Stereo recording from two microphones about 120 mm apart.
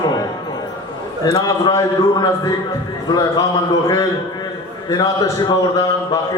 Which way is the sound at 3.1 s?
35° left (ahead or behind).